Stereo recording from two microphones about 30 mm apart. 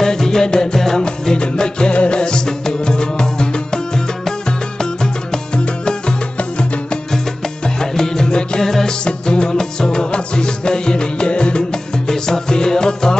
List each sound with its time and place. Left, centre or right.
0.0 s music: centre
0.7 s music: centre
1.4 s music: left
7.6 s music: centre
8.3 s music: left
8.5 s music: centre
9.0 s music: left
12.1 s music: left